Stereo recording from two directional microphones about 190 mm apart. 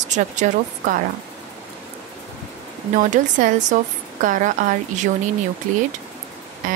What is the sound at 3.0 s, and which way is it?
A woman's voice, 40° right (ahead or behind).